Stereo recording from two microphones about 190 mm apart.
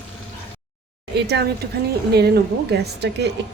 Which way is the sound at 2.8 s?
60° right (ahead or behind).